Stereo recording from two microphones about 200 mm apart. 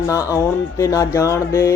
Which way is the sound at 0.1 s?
15° left (ahead or behind).